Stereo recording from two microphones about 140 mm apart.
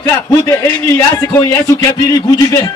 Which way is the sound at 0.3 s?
20° left (ahead or behind).